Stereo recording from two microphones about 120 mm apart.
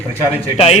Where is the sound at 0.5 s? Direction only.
55° left (ahead or behind).